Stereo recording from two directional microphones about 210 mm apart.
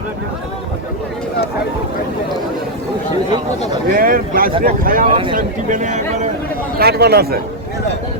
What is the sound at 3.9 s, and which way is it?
Speech, 40° right (ahead or behind).